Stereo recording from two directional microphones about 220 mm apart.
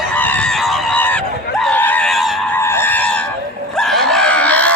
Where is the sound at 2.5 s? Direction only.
10° left (ahead or behind).